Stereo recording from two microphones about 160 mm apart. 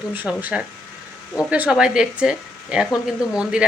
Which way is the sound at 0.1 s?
10° right (ahead or behind).